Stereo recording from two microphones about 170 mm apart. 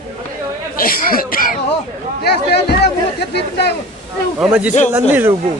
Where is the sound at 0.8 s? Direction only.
55° left (ahead or behind).